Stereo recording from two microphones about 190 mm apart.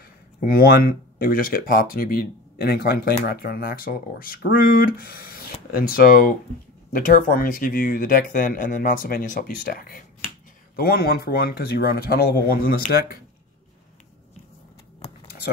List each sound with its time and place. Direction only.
0.4 s speech: 50° left (ahead or behind)